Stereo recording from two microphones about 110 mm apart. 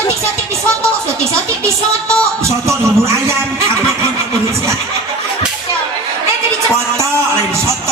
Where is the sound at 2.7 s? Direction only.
25° right (ahead or behind).